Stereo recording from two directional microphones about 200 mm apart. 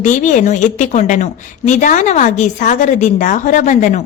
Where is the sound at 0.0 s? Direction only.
40° left (ahead or behind).